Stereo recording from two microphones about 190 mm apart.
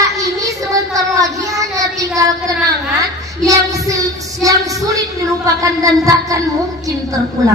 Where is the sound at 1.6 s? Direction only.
15° right (ahead or behind).